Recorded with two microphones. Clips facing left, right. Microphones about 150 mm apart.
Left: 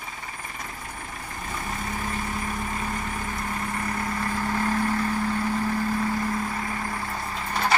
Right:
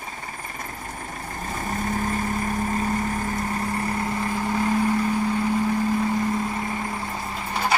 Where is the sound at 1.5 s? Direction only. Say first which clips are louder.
Right 5 dB; 45° right (ahead or behind).